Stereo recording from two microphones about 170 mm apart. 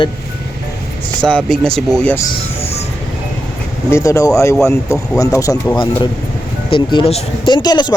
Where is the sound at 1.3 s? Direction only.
5° left (ahead or behind).